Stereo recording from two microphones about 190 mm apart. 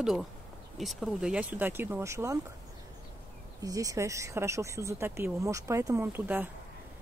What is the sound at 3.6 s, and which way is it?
Speech, 20° right (ahead or behind).